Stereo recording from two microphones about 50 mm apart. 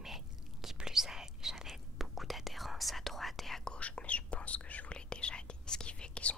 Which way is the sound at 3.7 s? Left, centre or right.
Left.